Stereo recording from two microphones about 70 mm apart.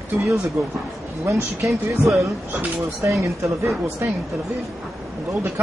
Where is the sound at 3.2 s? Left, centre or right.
Right.